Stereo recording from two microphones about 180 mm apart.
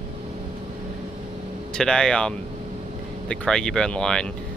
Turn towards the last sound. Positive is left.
turn(degrees=5)  # may be behind; listen again after turning